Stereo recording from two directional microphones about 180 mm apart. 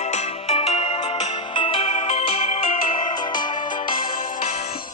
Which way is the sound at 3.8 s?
50° left (ahead or behind).